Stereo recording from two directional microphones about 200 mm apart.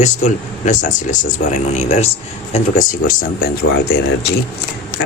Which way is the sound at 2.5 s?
45° left (ahead or behind).